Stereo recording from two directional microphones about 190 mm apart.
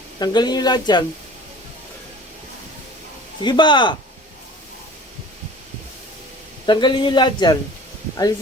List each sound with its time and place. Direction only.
0.2 s a man's voice: 20° left (ahead or behind)
3.4 s a man's voice: 25° left (ahead or behind)
6.7 s a man's voice: 25° left (ahead or behind)